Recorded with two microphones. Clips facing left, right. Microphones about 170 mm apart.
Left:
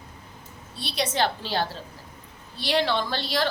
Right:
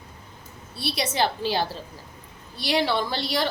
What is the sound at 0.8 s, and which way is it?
A woman's voice, 10° right (ahead or behind).